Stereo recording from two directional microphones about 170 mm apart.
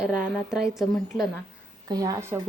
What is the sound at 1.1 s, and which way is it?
Speech, 25° left (ahead or behind).